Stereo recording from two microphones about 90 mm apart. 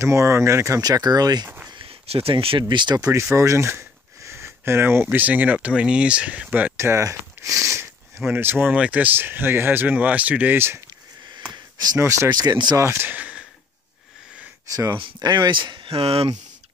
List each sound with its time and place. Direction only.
0.0 s speech: 35° right (ahead or behind)
1.7 s a sound: 80° right
2.7 s speech: 60° right (ahead or behind)
3.3 s a sound: 35° right (ahead or behind)
5.0 s speech: 15° right (ahead or behind)
6.8 s speech: 35° right (ahead or behind)
7.4 s a sound: 35° right (ahead or behind)
8.2 s speech: 20° right (ahead or behind)
11.5 s a sound: 45° right (ahead or behind)
12.3 s speech: 50° right (ahead or behind)
12.7 s speech: 30° right (ahead or behind)
14.7 s speech: 35° right (ahead or behind)
15.1 s speech: 45° right (ahead or behind); by 16.3 s 90° right